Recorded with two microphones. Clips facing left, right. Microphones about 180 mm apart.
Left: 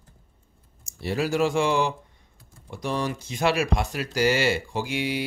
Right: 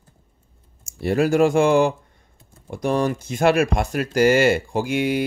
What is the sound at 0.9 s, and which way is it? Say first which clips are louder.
Speech: right 7 dB; 50° right (ahead or behind).